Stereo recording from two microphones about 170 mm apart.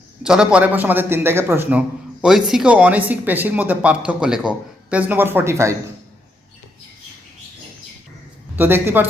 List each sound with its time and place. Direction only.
0.2 s speech: 5° right (ahead or behind)
2.2 s speech: centre (ahead or behind)
8.5 s speech: 10° right (ahead or behind)